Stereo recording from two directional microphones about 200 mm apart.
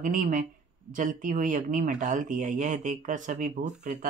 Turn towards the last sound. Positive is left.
turn(degrees=-40)  # may be behind; listen again after turning